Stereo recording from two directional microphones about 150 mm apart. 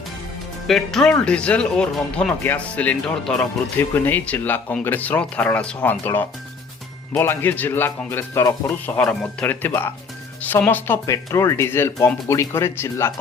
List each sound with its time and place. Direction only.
0.7 s speech: centre (ahead or behind); by 8.7 s 20° left (ahead or behind)
9.0 s speech: 5° left (ahead or behind)